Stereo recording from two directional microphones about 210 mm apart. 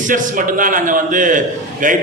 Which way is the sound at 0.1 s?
40° right (ahead or behind).